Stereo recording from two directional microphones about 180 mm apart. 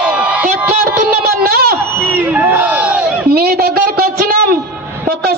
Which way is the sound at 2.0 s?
10° right (ahead or behind).